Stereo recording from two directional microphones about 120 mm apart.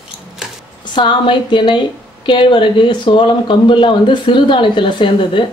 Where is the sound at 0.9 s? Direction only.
40° left (ahead or behind).